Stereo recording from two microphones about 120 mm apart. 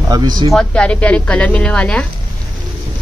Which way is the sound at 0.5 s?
10° left (ahead or behind).